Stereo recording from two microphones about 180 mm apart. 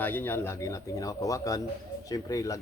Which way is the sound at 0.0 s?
10° left (ahead or behind).